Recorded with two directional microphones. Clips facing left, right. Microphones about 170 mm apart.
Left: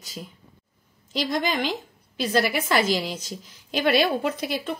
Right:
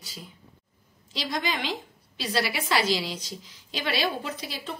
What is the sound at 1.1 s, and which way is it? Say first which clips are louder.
A woman's voice: left 5 dB; 50° left (ahead or behind).